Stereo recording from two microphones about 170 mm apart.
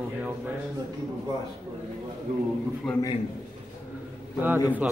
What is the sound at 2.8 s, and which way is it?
Speech, centre (ahead or behind).